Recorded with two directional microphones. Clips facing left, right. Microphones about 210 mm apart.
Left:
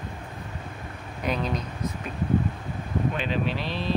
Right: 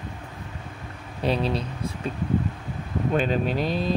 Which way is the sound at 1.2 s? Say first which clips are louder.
Right 4 dB; 30° right (ahead or behind).